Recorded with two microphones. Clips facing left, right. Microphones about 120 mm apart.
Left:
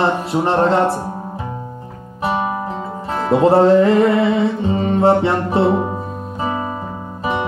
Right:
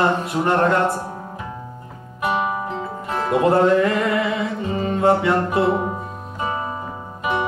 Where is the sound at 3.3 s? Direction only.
30° left (ahead or behind).